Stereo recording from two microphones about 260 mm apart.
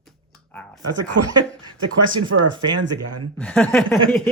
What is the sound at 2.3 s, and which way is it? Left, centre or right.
Speech, right.